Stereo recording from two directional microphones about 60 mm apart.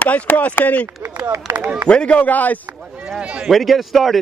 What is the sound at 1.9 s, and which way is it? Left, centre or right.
Speech, centre.